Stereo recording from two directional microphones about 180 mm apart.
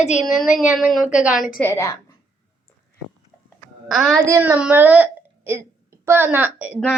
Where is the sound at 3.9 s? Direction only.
Centre (ahead or behind).